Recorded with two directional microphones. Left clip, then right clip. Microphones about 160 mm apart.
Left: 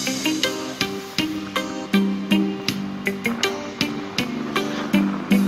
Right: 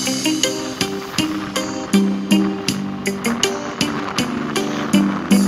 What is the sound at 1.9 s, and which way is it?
Music, 25° right (ahead or behind).